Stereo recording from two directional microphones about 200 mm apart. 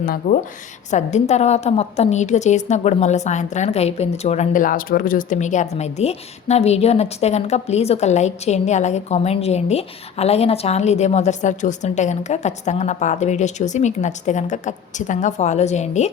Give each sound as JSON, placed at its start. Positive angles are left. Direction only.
{"t": 0.2, "sound": "speech", "side_deg": 60}
{"t": 0.9, "sound": "a woman's voice", "side_deg": 35}